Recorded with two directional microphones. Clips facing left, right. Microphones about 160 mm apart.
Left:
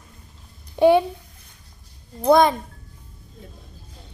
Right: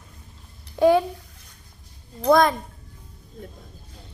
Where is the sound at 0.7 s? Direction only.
25° left (ahead or behind).